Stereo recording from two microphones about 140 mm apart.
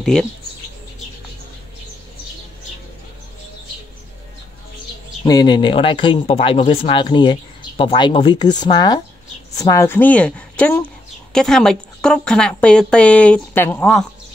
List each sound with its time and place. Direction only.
0.0 s speech: 5° left (ahead or behind)
5.2 s a woman's voice: 30° left (ahead or behind)